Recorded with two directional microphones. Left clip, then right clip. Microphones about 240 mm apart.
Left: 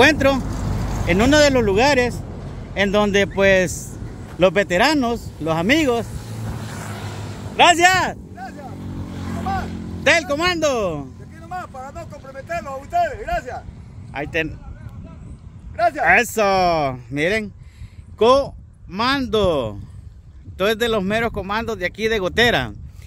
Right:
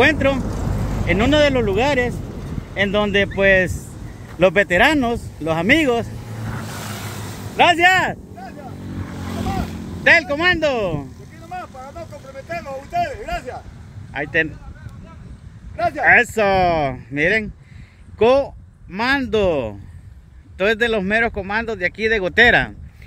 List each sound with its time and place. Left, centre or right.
0.0 s speech: left
2.1 s vehicle: right
2.7 s speech: left
6.8 s a sound: right
7.5 s speech: centre
9.1 s vehicle: right
9.4 s vehicle: right
10.0 s speech: centre
11.4 s vehicle: left
14.1 s speech: centre
15.7 s speech: left
16.0 s speech: centre